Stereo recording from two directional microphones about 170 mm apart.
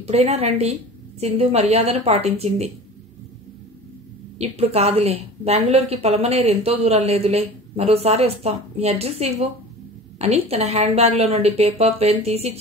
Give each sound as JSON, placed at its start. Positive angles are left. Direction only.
{"t": 0.0, "sound": "a woman's voice", "side_deg": -40}
{"t": 4.4, "sound": "a woman's voice", "side_deg": -35}